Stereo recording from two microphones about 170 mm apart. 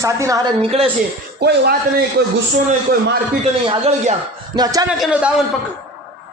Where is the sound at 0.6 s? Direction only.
35° right (ahead or behind).